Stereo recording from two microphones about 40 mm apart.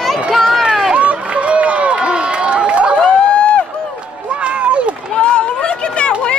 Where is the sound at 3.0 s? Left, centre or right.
Left.